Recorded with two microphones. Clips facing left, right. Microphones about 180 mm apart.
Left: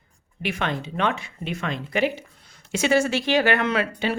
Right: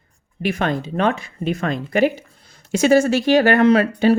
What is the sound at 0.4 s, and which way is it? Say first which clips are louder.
Speech: right 6 dB; 40° right (ahead or behind).